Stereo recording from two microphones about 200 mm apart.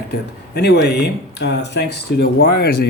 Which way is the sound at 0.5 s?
60° left (ahead or behind).